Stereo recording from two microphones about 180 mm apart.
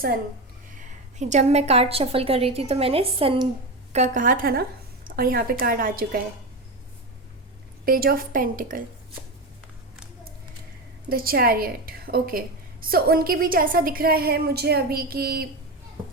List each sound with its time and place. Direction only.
0.8 s a woman's voice: 45° right (ahead or behind)
3.9 s a woman's voice: 45° right (ahead or behind)
7.9 s a woman's voice: 55° right (ahead or behind)
11.1 s a woman's voice: 55° right (ahead or behind)